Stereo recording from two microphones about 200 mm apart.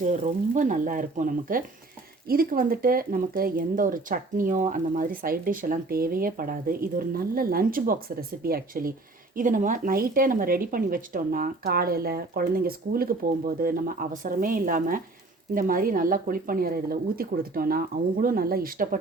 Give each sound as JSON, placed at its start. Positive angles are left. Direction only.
{"t": 0.0, "sound": "speech", "side_deg": -40}